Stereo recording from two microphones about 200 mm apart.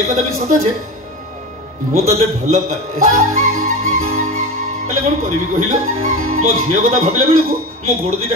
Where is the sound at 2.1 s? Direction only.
35° right (ahead or behind).